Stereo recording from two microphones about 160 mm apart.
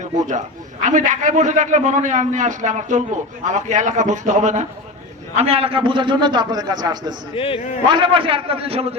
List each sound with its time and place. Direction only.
0.2 s a man's voice: 50° right (ahead or behind)
5.4 s a man's voice: 40° right (ahead or behind)
7.3 s a man's voice: 35° left (ahead or behind)
7.9 s a man's voice: 30° right (ahead or behind)